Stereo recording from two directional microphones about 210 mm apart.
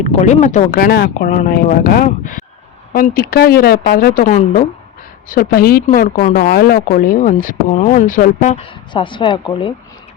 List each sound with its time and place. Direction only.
0.0 s speech: 35° left (ahead or behind)